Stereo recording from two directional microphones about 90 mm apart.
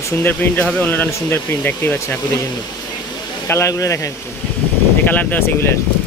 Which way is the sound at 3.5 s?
35° left (ahead or behind).